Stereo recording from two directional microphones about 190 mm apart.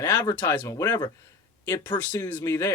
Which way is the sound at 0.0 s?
15° left (ahead or behind).